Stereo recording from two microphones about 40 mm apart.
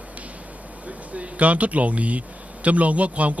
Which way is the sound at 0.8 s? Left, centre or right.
Right.